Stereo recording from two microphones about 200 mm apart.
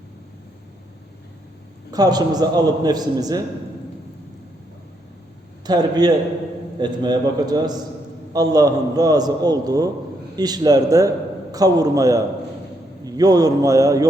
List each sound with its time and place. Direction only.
1.9 s a man's voice: 20° right (ahead or behind)
5.6 s a man's voice: 20° right (ahead or behind)